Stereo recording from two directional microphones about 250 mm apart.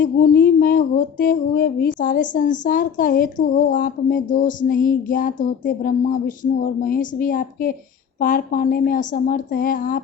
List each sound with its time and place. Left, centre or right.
0.6 s speech: left